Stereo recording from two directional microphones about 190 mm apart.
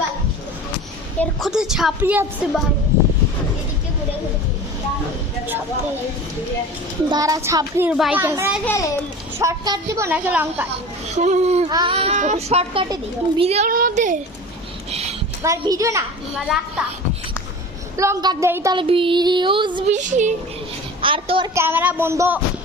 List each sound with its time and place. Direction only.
1.2 s a woman's voice: centre (ahead or behind)
7.1 s speech: 20° right (ahead or behind)
7.9 s a woman's voice: 5° right (ahead or behind)
8.6 s a child's voice: 15° left (ahead or behind)
9.4 s a woman's voice: 15° right (ahead or behind)
11.2 s a child's voice: 35° right (ahead or behind)
11.7 s a child's voice: 25° right (ahead or behind)
13.7 s a woman's voice: 50° right (ahead or behind)
15.4 s a woman's voice: 15° right (ahead or behind)
16.4 s a woman's voice: 5° right (ahead or behind)
17.9 s speech: 15° right (ahead or behind)
19.9 s a child's voice: 40° right (ahead or behind)
21.0 s speech: 25° right (ahead or behind)
21.5 s a woman's voice: 10° right (ahead or behind)